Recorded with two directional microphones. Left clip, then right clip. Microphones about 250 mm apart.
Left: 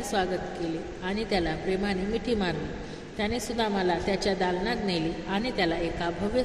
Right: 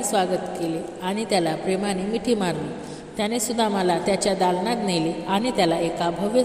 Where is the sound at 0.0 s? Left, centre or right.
Right.